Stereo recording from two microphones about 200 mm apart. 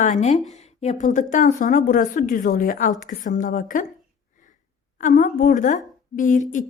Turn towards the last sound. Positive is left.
turn(degrees=40)  # may be behind; listen again after turning